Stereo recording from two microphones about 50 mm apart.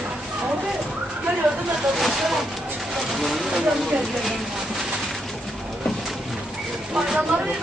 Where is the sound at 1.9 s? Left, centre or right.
Centre.